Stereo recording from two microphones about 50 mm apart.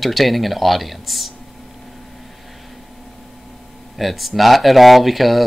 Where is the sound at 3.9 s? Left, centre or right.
Centre.